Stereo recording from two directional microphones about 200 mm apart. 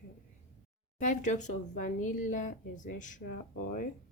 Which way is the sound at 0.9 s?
35° left (ahead or behind).